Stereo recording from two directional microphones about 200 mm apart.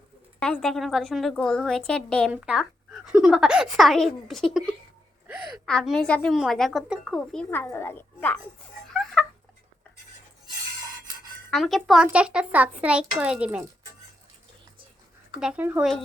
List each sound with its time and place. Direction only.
0.3 s a woman's voice: 5° left (ahead or behind)
8.9 s a sound: centre (ahead or behind)
11.5 s a woman's voice: centre (ahead or behind)
15.4 s speech: 5° right (ahead or behind)